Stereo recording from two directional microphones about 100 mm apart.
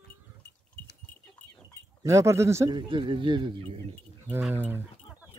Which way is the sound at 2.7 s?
55° right (ahead or behind).